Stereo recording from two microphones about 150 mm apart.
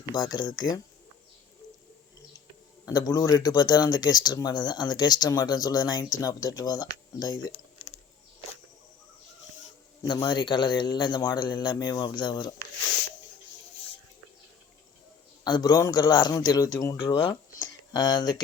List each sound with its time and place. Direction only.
0.0 s speech: 30° left (ahead or behind)
2.8 s speech: 25° left (ahead or behind)
10.0 s speech: 30° left (ahead or behind)
15.4 s speech: 30° left (ahead or behind)